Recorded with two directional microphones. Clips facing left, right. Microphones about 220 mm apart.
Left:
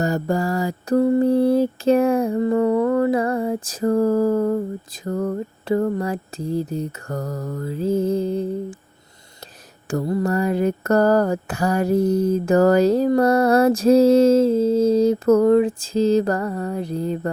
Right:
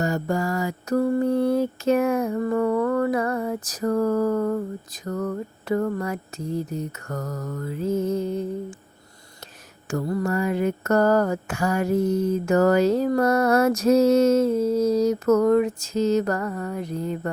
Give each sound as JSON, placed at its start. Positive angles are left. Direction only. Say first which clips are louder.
{"t": 0.0, "sound": "mantra", "louder": "left 3 dB", "side_deg": 35}
{"t": 9.9, "sound": "mantra", "louder": "left 3 dB", "side_deg": 25}